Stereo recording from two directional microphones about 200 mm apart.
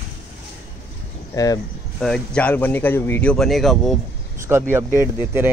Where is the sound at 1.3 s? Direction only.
20° left (ahead or behind).